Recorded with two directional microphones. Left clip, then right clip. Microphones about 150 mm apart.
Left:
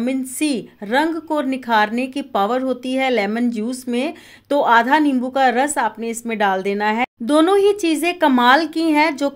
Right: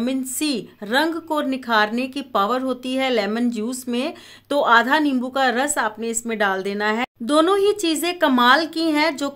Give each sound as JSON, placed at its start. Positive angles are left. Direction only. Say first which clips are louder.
{"t": 0.0, "sound": "a woman's voice", "louder": "left 2 dB", "side_deg": 15}